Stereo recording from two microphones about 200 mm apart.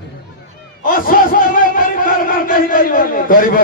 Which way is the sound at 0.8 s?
45° left (ahead or behind).